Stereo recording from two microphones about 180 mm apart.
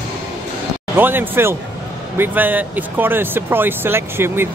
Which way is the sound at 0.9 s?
10° right (ahead or behind).